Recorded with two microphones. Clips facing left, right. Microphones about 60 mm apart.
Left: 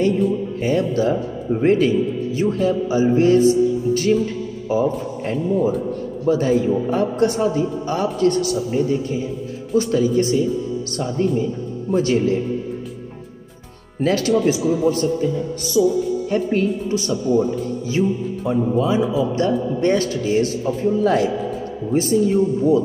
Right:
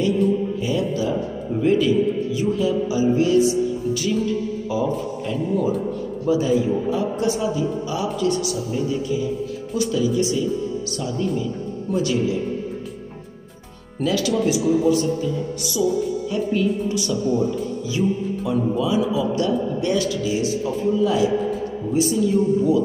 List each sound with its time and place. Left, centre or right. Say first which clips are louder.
0.6 s a man's voice: left 3 dB; left
6.2 s a man's voice: left 2 dB; left
14.0 s speech: left 3 dB; left
15.8 s speech: left 5 dB; centre
16.3 s a man's voice: left 1 dB; left